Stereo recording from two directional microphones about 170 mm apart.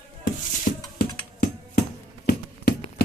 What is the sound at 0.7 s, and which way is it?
Music, 60° left (ahead or behind).